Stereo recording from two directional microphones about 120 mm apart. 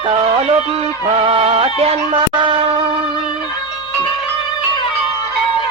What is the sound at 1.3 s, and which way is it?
Music, 55° right (ahead or behind).